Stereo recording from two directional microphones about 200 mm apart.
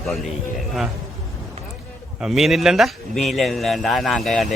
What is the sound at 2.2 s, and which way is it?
Speech, centre (ahead or behind).